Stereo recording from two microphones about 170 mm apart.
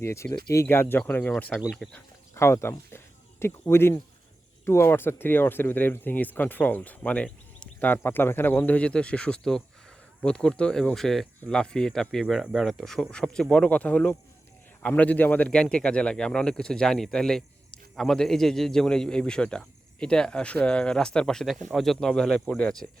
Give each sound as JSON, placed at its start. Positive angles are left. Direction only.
{"t": 0.0, "sound": "speech", "side_deg": 15}
{"t": 1.5, "sound": "speech", "side_deg": 0}
{"t": 2.3, "sound": "speech", "side_deg": 15}